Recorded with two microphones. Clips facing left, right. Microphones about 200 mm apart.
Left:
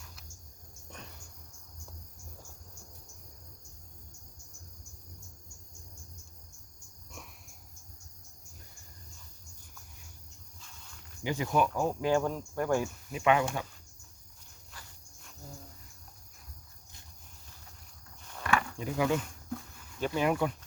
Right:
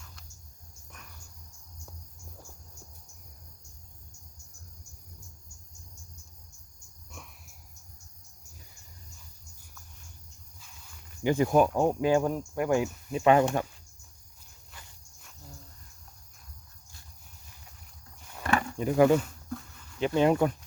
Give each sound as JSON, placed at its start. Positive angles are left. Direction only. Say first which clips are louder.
{"t": 0.9, "sound": "cricket", "louder": "left 5 dB", "side_deg": 30}
{"t": 11.2, "sound": "speech", "louder": "right 6 dB", "side_deg": -50}
{"t": 11.7, "sound": "speech", "louder": "right 4 dB", "side_deg": -20}
{"t": 13.1, "sound": "speech", "louder": "right 5 dB", "side_deg": -35}
{"t": 18.4, "sound": "a sound", "louder": "right 4 dB", "side_deg": -45}
{"t": 20.0, "sound": "speech", "louder": "right 5 dB", "side_deg": -30}